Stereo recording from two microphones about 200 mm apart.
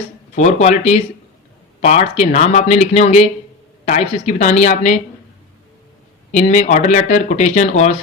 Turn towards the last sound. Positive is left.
turn(degrees=35)  # may be behind; listen again after turning